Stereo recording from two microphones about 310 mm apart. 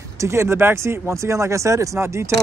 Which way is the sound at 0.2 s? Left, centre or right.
Centre.